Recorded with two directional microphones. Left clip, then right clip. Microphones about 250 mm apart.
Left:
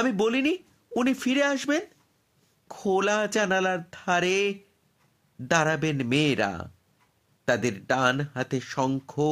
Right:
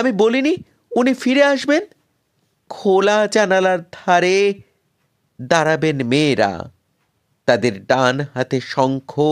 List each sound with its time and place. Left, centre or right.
0.0 s speech: right